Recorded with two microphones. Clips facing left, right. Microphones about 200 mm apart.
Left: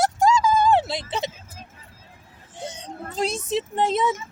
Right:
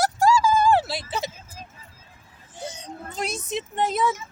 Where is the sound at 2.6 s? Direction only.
30° left (ahead or behind).